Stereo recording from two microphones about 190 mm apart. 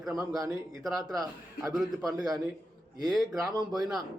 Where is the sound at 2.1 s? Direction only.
20° right (ahead or behind).